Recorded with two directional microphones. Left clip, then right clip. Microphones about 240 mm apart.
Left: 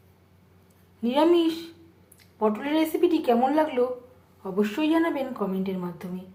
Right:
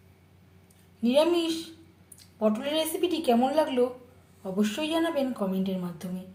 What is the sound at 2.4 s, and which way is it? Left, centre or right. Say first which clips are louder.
A woman's voice: left 2 dB; centre.